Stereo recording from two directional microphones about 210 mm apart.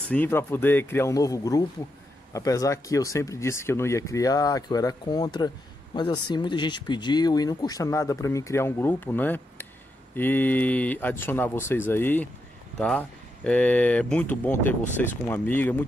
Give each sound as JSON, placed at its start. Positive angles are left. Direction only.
{"t": 0.1, "sound": "speech", "side_deg": 10}